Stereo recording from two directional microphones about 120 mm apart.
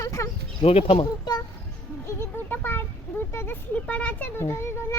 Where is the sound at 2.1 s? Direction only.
20° left (ahead or behind).